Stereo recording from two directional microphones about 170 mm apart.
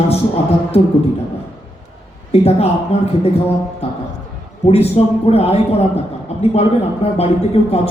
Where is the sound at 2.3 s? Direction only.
35° left (ahead or behind).